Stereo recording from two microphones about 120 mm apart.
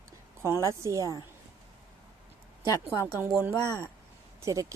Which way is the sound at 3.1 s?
20° right (ahead or behind).